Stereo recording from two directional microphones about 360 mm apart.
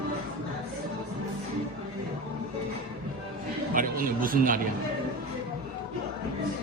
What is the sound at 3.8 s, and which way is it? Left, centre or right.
Music, right.